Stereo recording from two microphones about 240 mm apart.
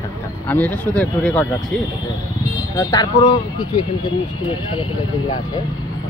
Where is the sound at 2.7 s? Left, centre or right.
Centre.